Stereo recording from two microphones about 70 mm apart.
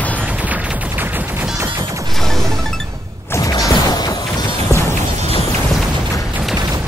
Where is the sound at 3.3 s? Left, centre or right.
Left.